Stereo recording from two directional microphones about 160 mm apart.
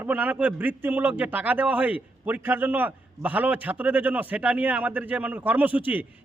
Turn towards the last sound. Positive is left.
turn(degrees=-10)  # may be behind; listen again after turning